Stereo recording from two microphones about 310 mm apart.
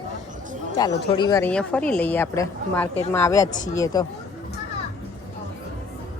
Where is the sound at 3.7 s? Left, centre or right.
Centre.